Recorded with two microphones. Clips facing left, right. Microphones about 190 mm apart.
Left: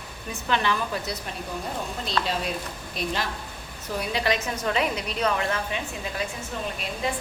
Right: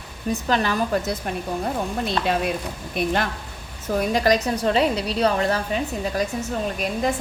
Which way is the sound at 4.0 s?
45° right (ahead or behind).